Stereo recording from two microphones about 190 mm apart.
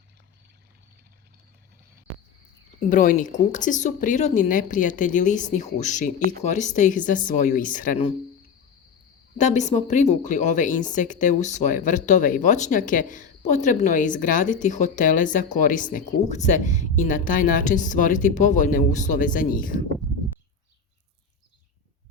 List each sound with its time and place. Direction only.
2.8 s speech: 45° left (ahead or behind)
9.4 s speech: 40° left (ahead or behind)